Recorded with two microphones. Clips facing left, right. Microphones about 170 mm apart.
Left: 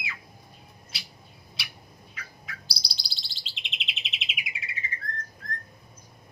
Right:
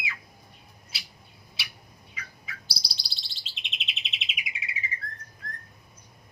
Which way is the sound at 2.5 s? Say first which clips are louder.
Left 1 dB; centre (ahead or behind).